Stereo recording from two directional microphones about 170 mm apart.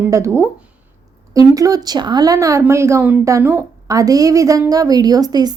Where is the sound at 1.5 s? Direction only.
20° right (ahead or behind).